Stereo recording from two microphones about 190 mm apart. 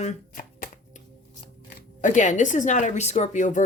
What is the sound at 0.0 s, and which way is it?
Shuffling cards, 40° left (ahead or behind).